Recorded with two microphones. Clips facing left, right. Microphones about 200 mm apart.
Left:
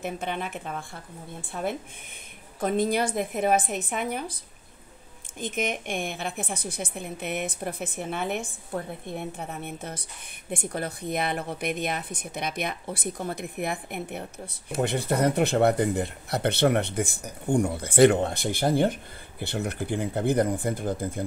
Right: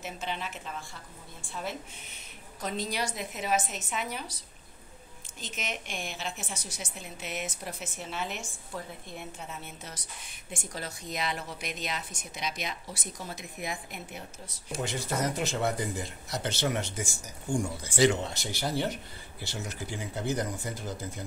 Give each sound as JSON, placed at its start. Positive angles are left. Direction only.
{"t": 0.0, "sound": "a woman's voice", "side_deg": 55}
{"t": 5.4, "sound": "a woman's voice", "side_deg": 55}